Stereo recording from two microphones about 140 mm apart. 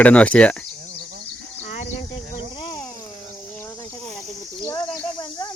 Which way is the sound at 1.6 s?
55° left (ahead or behind).